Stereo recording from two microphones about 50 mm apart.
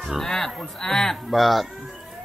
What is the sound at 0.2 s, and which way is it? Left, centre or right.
Speech, centre.